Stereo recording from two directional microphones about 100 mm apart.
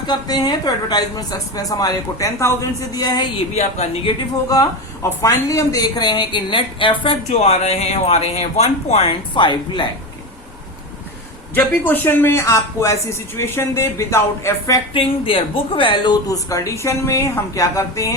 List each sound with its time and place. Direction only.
0.1 s a woman's voice: 45° left (ahead or behind)
3.3 s a woman's voice: 80° left
4.4 s a woman's voice: 40° left (ahead or behind)
11.5 s speech: 20° left (ahead or behind)
14.9 s a woman's voice: 65° left (ahead or behind)
16.2 s speech: 35° left (ahead or behind)